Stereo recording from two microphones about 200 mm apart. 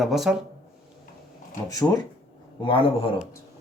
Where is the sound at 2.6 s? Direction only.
25° left (ahead or behind).